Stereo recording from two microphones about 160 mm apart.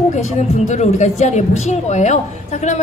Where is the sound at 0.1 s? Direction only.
45° left (ahead or behind).